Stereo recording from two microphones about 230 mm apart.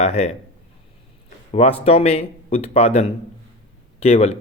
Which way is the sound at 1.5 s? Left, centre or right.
Left.